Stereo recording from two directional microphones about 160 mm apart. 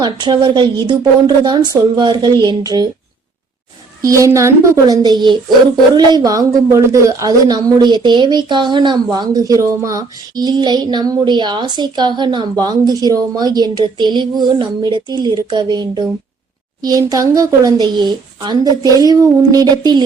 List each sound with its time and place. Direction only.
0.0 s a woman's voice: 30° right (ahead or behind)
4.0 s a woman's voice: 20° right (ahead or behind)